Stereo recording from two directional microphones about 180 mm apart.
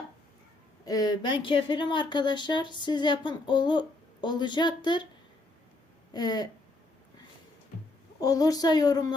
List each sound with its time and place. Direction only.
0.9 s speech: 20° left (ahead or behind)
6.1 s speech: 20° left (ahead or behind)
8.2 s speech: 20° left (ahead or behind)